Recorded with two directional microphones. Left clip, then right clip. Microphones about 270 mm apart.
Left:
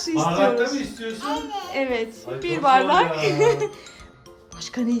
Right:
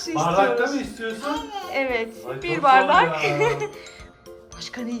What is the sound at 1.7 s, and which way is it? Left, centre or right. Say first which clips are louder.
A woman's voice: right 1 dB; centre.